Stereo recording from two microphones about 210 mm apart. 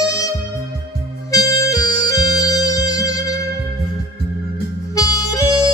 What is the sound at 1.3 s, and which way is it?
Music, 15° left (ahead or behind).